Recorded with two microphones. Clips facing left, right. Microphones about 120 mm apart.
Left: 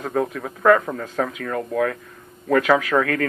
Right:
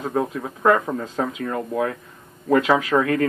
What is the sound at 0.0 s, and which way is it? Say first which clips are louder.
Speech: even; 20° right (ahead or behind).